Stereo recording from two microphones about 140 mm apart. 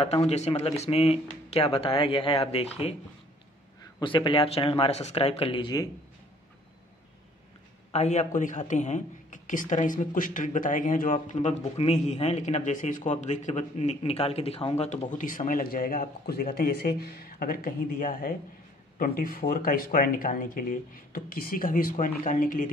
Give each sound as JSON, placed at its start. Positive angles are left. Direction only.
{"t": 0.3, "sound": "speech", "side_deg": 50}
{"t": 4.0, "sound": "speech", "side_deg": 35}
{"t": 7.9, "sound": "speech", "side_deg": 55}
{"t": 22.0, "sound": "speech", "side_deg": 75}